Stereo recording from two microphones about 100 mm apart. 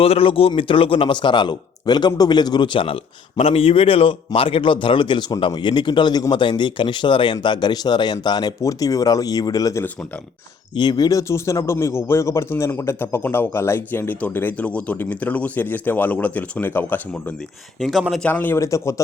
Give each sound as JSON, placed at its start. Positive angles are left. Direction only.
{"t": 0.0, "sound": "speech", "side_deg": 70}
{"t": 2.7, "sound": "speech", "side_deg": 65}
{"t": 17.7, "sound": "speech", "side_deg": 0}
{"t": 18.2, "sound": "speech", "side_deg": 20}
{"t": 18.6, "sound": "speech", "side_deg": 30}